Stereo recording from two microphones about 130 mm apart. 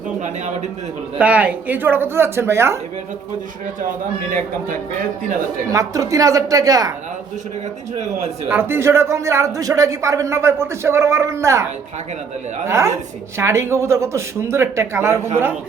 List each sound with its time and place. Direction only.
1.2 s speech: 10° right (ahead or behind)
5.7 s a man's voice: 25° right (ahead or behind)
8.4 s a man's voice: 15° right (ahead or behind)
12.6 s a man's voice: 20° right (ahead or behind)